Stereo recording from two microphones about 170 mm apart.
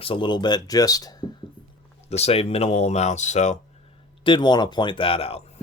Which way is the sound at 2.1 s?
40° left (ahead or behind).